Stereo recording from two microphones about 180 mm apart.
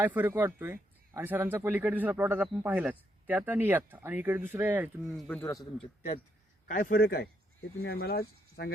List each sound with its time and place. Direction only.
0.0 s speech: 10° right (ahead or behind)
5.4 s a man's voice: 20° left (ahead or behind)
6.7 s speech: 50° left (ahead or behind)